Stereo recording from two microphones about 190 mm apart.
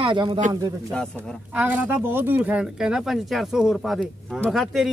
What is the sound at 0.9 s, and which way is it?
Speech, 5° left (ahead or behind).